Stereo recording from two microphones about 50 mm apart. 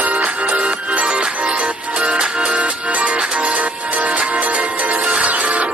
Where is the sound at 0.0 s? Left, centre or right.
Right.